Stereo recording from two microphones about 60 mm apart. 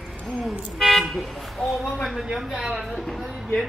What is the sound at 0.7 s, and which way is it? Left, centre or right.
A man's voice, centre.